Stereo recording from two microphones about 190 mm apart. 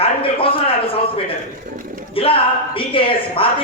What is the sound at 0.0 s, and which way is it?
A man's voice, 30° left (ahead or behind).